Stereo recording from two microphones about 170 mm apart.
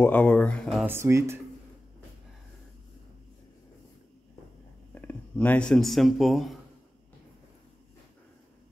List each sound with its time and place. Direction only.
0.0 s speech: 10° left (ahead or behind)
0.8 s speech: 15° right (ahead or behind)
4.9 s speech: 10° left (ahead or behind)